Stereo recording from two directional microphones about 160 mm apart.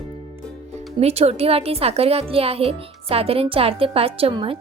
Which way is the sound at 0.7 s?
40° right (ahead or behind).